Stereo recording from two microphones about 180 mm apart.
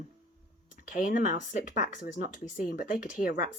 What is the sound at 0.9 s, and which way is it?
A child's voice, 45° left (ahead or behind).